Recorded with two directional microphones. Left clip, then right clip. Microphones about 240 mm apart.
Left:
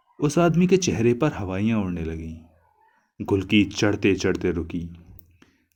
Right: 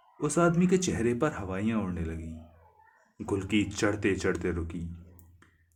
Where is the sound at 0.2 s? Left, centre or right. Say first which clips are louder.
Left 5 dB; left.